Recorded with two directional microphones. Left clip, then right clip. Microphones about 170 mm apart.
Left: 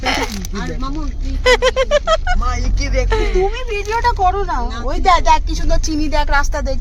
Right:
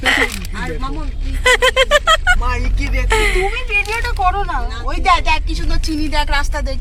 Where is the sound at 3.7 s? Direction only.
60° left (ahead or behind).